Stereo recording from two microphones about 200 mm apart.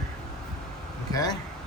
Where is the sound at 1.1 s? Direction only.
20° left (ahead or behind).